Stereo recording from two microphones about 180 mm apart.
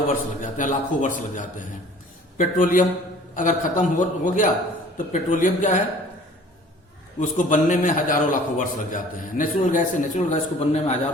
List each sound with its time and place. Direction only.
0.4 s a man's voice: 45° left (ahead or behind)
7.2 s a man's voice: 45° left (ahead or behind)